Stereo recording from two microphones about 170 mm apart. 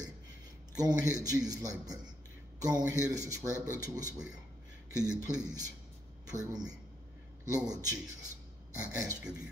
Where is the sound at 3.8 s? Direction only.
20° right (ahead or behind).